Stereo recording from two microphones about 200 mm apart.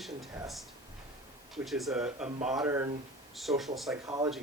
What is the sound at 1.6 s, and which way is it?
Speech, centre (ahead or behind).